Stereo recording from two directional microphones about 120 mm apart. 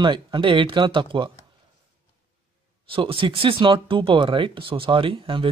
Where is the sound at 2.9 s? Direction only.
45° right (ahead or behind).